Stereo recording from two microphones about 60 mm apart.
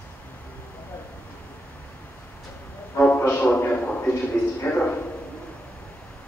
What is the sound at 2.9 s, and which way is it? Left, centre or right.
Music, left.